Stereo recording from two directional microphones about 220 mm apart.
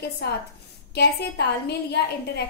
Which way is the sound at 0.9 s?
45° left (ahead or behind).